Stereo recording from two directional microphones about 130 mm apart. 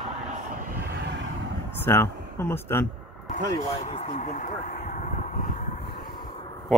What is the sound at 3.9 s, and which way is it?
Vehicle, 60° left (ahead or behind).